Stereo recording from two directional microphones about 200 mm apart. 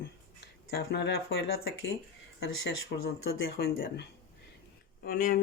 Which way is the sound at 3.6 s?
50° left (ahead or behind).